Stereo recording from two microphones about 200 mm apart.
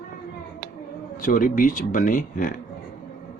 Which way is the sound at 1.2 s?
45° left (ahead or behind).